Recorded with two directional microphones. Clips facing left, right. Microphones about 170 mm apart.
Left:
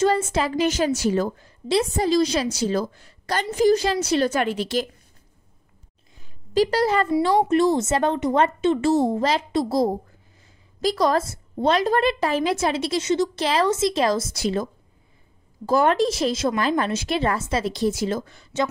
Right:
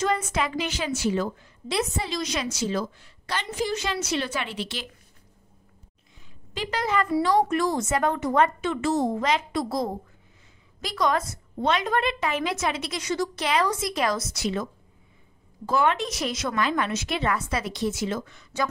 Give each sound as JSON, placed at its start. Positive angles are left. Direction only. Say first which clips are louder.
{"t": 0.0, "sound": "a woman's voice", "louder": "left 5 dB", "side_deg": 30}
{"t": 6.5, "sound": "a woman's voice", "louder": "left 7 dB", "side_deg": 35}
{"t": 16.1, "sound": "a woman's voice", "louder": "left 7 dB", "side_deg": 30}